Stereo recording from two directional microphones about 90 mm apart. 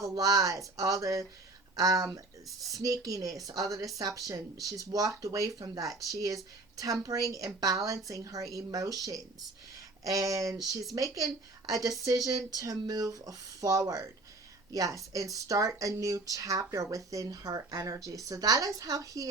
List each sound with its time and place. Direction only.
0.0 s speech: 40° right (ahead or behind)